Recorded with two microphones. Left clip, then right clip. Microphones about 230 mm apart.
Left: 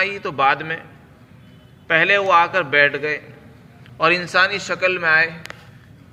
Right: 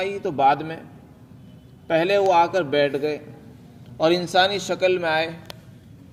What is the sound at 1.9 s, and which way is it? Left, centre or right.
A man's voice, right.